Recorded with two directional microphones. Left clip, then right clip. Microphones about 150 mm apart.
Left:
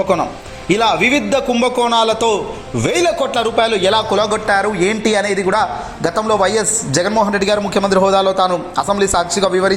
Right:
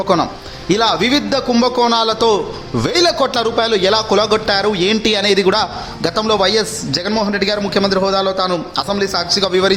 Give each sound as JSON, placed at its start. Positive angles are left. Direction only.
{"t": 0.7, "sound": "a man's voice", "side_deg": -20}
{"t": 2.2, "sound": "a man's voice", "side_deg": -30}